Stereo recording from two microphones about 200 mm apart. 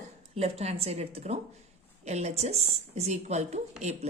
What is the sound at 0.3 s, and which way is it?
A woman's voice, 30° right (ahead or behind).